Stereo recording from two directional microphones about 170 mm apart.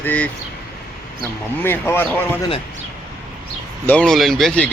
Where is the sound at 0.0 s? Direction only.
10° left (ahead or behind).